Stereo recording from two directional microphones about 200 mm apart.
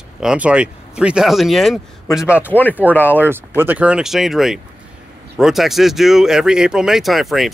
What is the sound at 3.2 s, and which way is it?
Speech, 10° right (ahead or behind).